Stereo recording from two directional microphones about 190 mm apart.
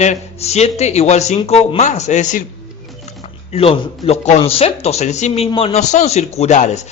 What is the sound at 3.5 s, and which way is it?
Speech, 30° left (ahead or behind).